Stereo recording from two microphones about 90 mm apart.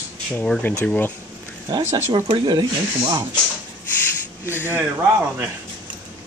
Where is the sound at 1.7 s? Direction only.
50° right (ahead or behind).